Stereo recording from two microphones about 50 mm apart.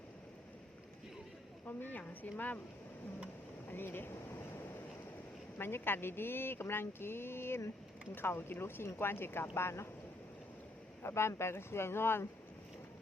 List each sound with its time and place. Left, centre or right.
1.6 s speech: left
3.7 s speech: left
5.5 s speech: left
11.0 s speech: left